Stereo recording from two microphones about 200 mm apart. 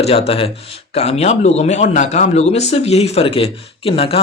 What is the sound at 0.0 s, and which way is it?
A man's voice, 30° left (ahead or behind).